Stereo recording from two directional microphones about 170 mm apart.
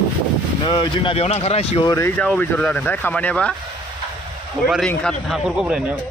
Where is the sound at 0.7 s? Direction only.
25° left (ahead or behind).